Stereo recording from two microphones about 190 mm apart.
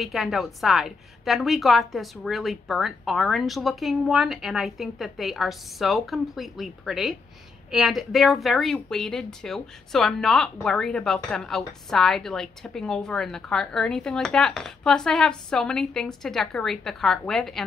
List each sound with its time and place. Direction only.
0.0 s a woman's voice: centre (ahead or behind)